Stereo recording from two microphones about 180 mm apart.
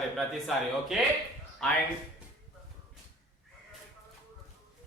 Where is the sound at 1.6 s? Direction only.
5° left (ahead or behind).